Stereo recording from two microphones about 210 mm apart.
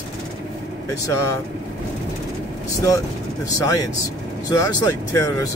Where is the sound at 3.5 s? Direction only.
15° left (ahead or behind).